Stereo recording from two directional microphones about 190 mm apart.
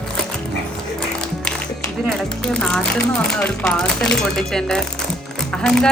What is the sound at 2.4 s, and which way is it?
Speech, 5° left (ahead or behind).